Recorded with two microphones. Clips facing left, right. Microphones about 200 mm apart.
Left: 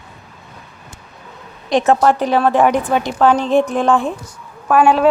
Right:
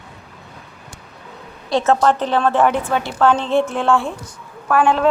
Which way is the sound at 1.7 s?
15° left (ahead or behind).